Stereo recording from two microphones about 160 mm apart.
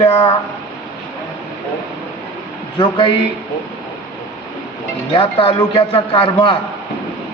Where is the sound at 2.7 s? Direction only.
30° left (ahead or behind).